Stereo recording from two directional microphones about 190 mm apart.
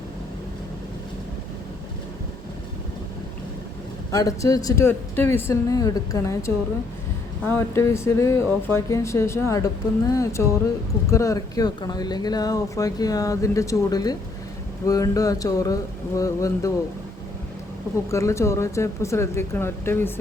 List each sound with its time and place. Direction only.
4.1 s speech: 20° left (ahead or behind)
18.1 s speech: 15° left (ahead or behind)